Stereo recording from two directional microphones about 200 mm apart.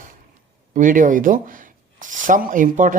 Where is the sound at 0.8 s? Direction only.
40° right (ahead or behind).